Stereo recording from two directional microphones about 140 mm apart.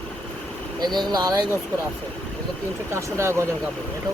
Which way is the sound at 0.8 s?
30° right (ahead or behind).